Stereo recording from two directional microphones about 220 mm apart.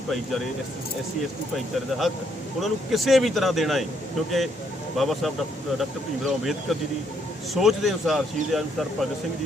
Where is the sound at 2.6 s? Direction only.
Centre (ahead or behind).